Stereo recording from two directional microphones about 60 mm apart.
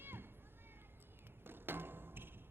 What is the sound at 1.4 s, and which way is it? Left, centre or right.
Thump, right.